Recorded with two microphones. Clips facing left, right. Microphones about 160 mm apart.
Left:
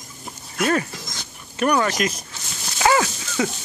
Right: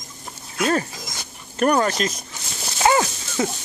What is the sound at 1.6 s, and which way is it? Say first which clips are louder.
Speech: right 1 dB; 40° right (ahead or behind).